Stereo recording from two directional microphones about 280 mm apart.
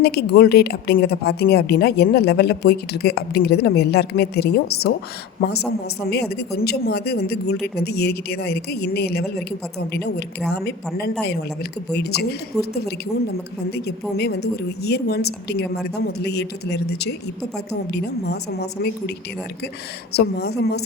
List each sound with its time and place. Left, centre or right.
0.0 s a woman's voice: left
20.1 s speech: left